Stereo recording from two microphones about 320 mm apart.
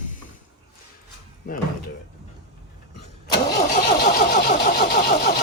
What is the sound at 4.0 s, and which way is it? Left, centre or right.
Engine starting, left.